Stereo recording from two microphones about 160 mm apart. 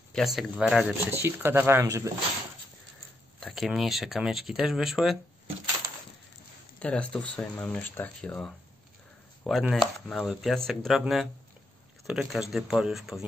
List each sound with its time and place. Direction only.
0.1 s speech: centre (ahead or behind)
1.1 s speech: 15° right (ahead or behind)
3.3 s speech: centre (ahead or behind)
6.8 s speech: 5° left (ahead or behind)